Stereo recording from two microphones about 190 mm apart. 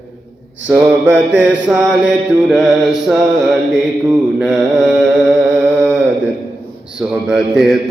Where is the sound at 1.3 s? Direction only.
70° right (ahead or behind).